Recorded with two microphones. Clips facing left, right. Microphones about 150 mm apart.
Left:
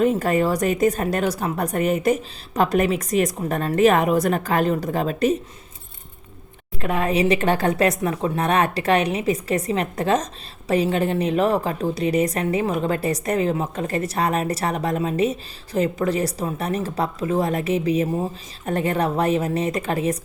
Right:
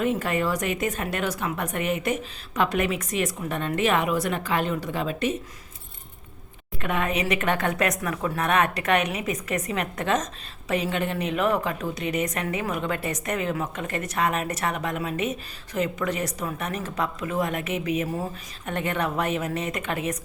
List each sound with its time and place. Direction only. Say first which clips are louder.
0.0 s a woman's voice: left 6 dB; 40° left (ahead or behind)
6.7 s a woman's voice: left 5 dB; 35° left (ahead or behind)